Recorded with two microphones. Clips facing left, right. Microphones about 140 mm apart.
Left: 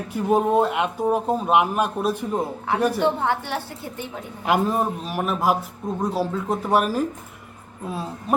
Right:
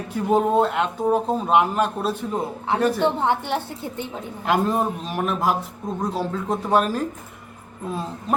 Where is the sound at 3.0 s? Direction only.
20° right (ahead or behind).